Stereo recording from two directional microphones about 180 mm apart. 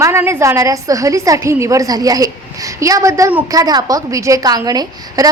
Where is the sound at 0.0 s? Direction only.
15° right (ahead or behind).